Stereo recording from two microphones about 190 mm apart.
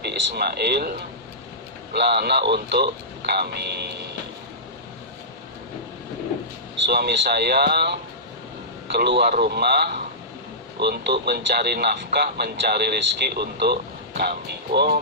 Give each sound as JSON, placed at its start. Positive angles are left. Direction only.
{"t": 0.0, "sound": "speech", "side_deg": -60}
{"t": 6.8, "sound": "speech", "side_deg": -60}